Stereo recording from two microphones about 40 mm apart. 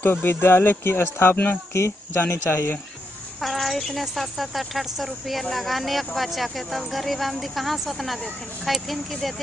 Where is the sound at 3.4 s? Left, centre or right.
Centre.